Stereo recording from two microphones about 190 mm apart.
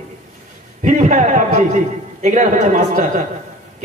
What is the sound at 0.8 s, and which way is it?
A man's voice, 40° right (ahead or behind).